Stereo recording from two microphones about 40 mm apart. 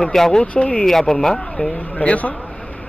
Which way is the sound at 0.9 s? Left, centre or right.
Centre.